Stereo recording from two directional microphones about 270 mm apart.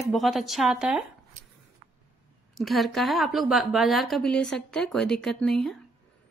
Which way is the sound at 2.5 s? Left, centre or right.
Centre.